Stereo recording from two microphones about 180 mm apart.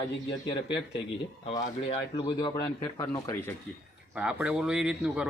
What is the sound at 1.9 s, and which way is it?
Speech, 25° left (ahead or behind).